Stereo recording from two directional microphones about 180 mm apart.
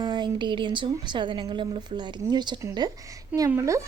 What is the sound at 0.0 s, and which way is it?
A woman's voice, 25° right (ahead or behind).